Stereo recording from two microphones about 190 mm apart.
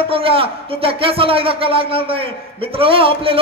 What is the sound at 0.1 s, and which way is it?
Speech, 30° right (ahead or behind).